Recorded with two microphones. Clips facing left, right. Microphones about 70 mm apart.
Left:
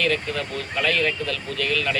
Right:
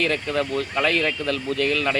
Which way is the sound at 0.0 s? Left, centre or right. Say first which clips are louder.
Right 1 dB; right.